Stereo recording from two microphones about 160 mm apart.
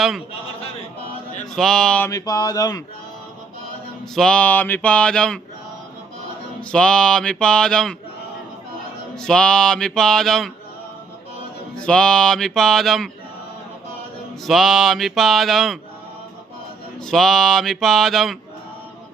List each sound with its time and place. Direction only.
1.5 s speech: 5° left (ahead or behind)
2.0 s speech: 25° left (ahead or behind)
4.1 s a sound: 5° left (ahead or behind)
6.7 s speech: 5° left (ahead or behind)
9.1 s speech: 5° left (ahead or behind)
11.8 s speech: 5° left (ahead or behind)
14.4 s speech: centre (ahead or behind)
17.0 s speech: centre (ahead or behind)